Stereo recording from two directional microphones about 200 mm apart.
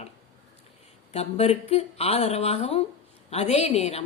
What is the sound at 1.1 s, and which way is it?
A woman's voice, 30° left (ahead or behind).